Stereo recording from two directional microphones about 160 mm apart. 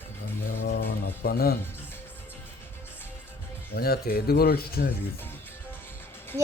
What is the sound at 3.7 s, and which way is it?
Speech, 75° left (ahead or behind).